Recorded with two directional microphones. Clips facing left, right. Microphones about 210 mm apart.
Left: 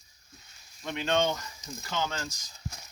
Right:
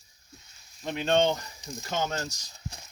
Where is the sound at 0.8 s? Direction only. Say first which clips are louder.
Right 3 dB; 35° right (ahead or behind).